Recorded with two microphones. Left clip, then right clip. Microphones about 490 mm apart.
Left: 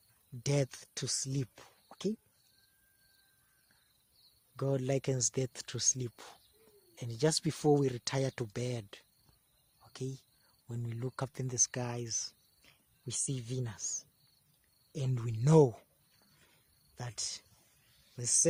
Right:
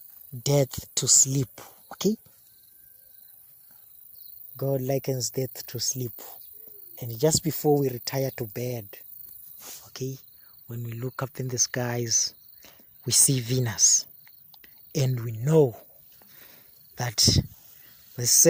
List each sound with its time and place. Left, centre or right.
0.4 s speech: left
4.5 s speech: left
9.8 s a sound: left
10.7 s speech: left
16.9 s speech: left